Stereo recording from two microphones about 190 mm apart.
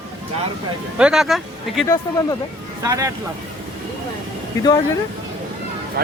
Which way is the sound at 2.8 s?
15° right (ahead or behind).